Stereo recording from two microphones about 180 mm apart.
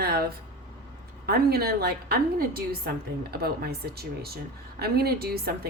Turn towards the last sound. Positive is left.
turn(degrees=-60)  # may be behind; listen again after turning